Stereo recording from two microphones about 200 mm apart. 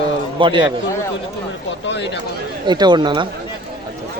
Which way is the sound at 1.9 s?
60° left (ahead or behind).